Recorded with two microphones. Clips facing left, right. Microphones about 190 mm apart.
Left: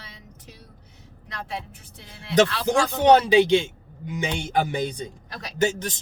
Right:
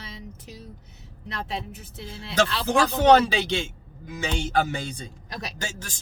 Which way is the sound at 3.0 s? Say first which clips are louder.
Left 3 dB; 15° left (ahead or behind).